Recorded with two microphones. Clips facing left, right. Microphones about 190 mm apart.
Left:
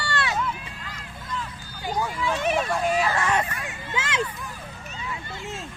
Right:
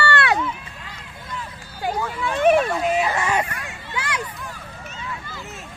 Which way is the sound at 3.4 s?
25° left (ahead or behind).